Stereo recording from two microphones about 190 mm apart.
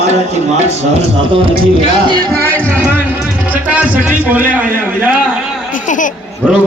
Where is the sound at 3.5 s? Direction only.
10° right (ahead or behind).